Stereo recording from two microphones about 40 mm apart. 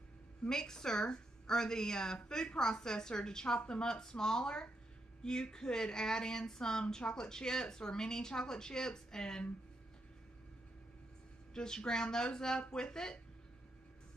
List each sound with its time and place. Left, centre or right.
0.5 s speech: centre
11.5 s speech: centre